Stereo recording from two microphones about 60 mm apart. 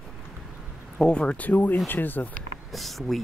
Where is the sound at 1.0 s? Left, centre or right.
Centre.